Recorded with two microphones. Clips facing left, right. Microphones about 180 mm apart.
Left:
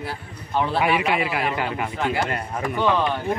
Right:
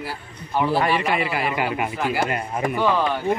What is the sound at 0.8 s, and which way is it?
A man's voice, 5° left (ahead or behind).